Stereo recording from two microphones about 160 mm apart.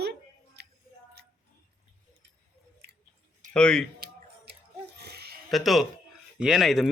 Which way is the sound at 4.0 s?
90° right.